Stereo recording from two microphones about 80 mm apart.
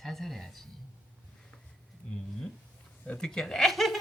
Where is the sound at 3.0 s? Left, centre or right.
Centre.